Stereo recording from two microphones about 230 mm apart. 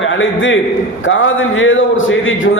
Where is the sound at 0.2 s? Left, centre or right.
Left.